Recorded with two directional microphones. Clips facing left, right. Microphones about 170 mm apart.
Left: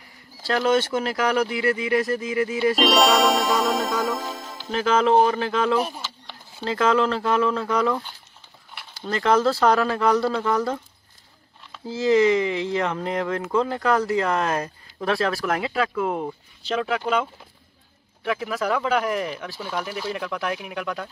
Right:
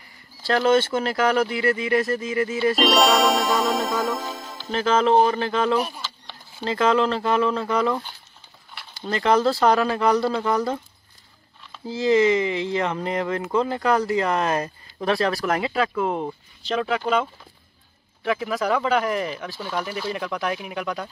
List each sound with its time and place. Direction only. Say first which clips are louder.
0.5 s speech: right 2 dB; 5° left (ahead or behind)
5.8 s speech: left 1 dB; 25° left (ahead or behind)
6.0 s speech: even; 5° left (ahead or behind)
9.0 s speech: even; 5° right (ahead or behind)
11.7 s speech: even; centre (ahead or behind)